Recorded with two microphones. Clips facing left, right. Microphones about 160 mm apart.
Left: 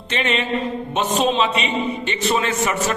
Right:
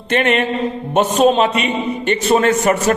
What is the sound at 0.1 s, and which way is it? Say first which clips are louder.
A man's voice: right 6 dB; 55° right (ahead or behind).